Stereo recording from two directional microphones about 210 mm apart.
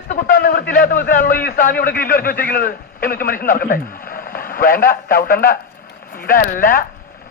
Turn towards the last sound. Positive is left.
turn(degrees=40)  # may be behind; listen again after turning